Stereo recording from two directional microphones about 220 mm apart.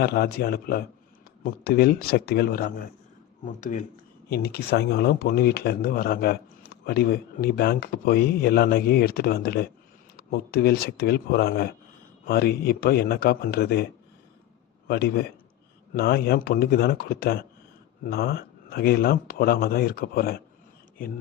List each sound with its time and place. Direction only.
0.0 s speech: 45° left (ahead or behind)
4.3 s speech: 45° left (ahead or behind)
14.8 s speech: 45° left (ahead or behind)